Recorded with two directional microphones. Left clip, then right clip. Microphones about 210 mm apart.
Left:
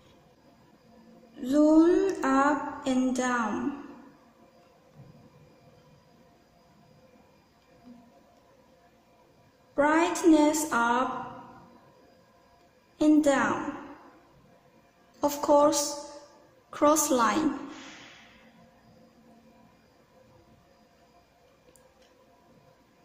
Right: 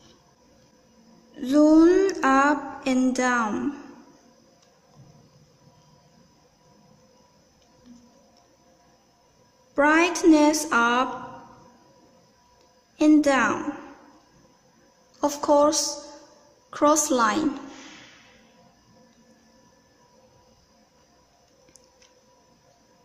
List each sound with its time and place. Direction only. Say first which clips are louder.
1.4 s a sound: right 4 dB; 25° right (ahead or behind)
9.8 s a woman's voice: right 5 dB; 25° right (ahead or behind)
12.9 s a woman's voice: right 4 dB; 25° right (ahead or behind)
15.1 s a woman's voice: right 3 dB; 15° right (ahead or behind)